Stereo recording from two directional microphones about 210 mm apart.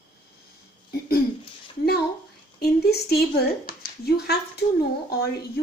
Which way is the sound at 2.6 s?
50° left (ahead or behind).